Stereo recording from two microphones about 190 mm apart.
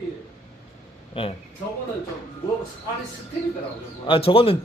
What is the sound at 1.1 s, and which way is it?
Speech, 30° left (ahead or behind).